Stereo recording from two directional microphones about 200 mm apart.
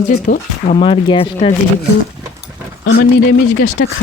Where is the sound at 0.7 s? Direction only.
25° left (ahead or behind).